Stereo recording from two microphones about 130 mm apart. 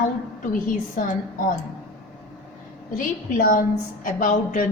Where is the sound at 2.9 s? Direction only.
90° left.